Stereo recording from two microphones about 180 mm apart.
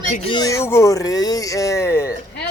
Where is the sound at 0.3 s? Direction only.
20° left (ahead or behind).